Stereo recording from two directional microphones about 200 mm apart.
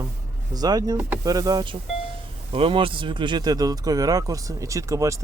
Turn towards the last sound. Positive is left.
turn(degrees=-15)  # may be behind; listen again after turning